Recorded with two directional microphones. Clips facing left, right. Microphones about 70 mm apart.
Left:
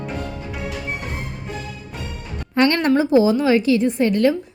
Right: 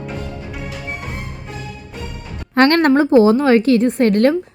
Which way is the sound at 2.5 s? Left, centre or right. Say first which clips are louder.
Right 4 dB; right.